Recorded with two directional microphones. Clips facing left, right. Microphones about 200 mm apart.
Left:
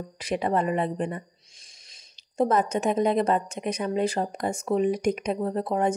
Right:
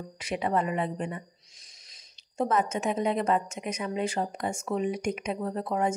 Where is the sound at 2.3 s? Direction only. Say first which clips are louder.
Left 4 dB; 35° left (ahead or behind).